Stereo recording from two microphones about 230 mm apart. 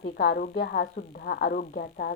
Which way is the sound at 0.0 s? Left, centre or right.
Left.